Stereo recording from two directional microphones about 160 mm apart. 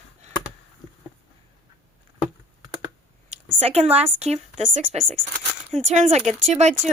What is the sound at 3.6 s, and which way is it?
Speech, 40° right (ahead or behind).